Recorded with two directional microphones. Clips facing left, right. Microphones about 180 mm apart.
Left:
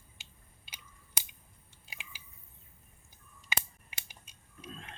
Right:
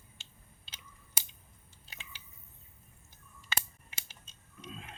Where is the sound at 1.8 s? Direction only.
10° left (ahead or behind).